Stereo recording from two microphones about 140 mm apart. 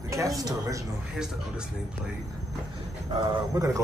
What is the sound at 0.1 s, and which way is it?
Speech, 25° right (ahead or behind).